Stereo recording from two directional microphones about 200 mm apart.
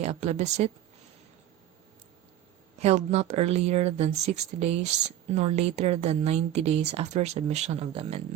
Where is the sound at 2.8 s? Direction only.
30° right (ahead or behind).